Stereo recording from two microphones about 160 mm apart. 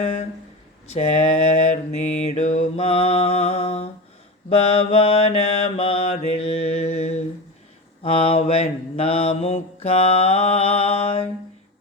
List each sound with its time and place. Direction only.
0.9 s mantra: 45° left (ahead or behind)